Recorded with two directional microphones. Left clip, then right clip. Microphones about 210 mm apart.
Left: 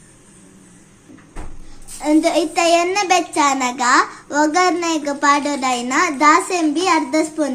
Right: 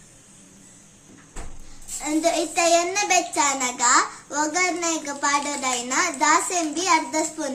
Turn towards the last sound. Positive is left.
turn(degrees=20)  # may be behind; listen again after turning